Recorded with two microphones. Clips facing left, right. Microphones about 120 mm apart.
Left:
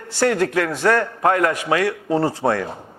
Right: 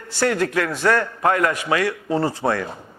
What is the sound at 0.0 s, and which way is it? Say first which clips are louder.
A man's voice: left 2 dB; 40° left (ahead or behind).